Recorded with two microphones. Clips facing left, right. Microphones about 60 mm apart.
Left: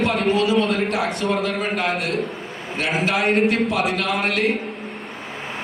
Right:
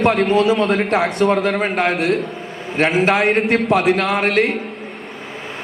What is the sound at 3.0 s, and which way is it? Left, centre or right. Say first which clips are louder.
A man's voice: right 3 dB; right.